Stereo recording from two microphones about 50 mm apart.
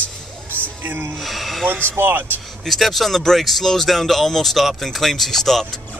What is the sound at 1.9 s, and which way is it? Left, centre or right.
Speech, right.